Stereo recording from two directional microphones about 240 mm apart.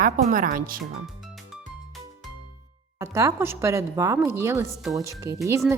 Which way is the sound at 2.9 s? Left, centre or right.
Centre.